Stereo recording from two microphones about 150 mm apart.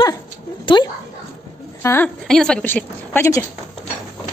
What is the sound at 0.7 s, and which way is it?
Speech, 35° left (ahead or behind).